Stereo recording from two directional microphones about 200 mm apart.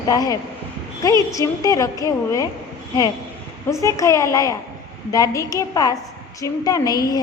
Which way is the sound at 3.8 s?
15° left (ahead or behind).